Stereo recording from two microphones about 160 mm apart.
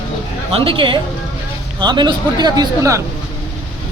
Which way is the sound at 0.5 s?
35° right (ahead or behind).